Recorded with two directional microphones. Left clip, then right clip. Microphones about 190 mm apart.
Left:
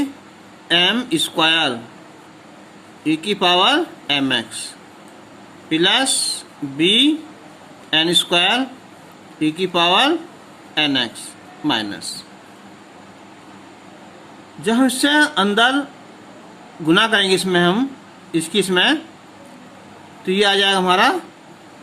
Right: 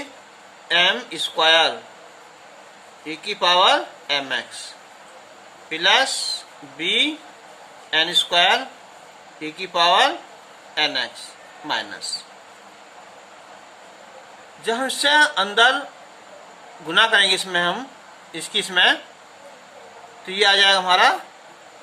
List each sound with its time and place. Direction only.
0.7 s speech: 30° left (ahead or behind)
3.1 s speech: 30° left (ahead or behind)
5.6 s speech: 25° left (ahead or behind)
14.6 s speech: 20° left (ahead or behind)
16.8 s speech: 25° left (ahead or behind)
20.2 s speech: 25° left (ahead or behind)